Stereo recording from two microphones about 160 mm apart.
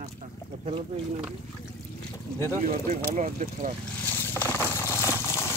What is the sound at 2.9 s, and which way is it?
Speech, 50° right (ahead or behind).